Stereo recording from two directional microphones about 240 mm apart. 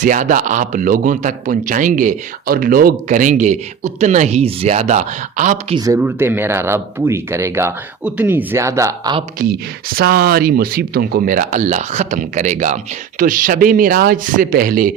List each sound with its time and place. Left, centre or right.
0.0 s speech: right
5.7 s speech: centre
9.4 s speech: right